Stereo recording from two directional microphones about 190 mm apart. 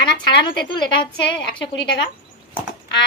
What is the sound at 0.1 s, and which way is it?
Speech, 25° left (ahead or behind).